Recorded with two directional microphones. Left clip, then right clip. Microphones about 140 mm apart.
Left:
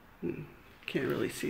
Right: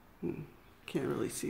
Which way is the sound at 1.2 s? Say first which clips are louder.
Left 3 dB; 20° right (ahead or behind).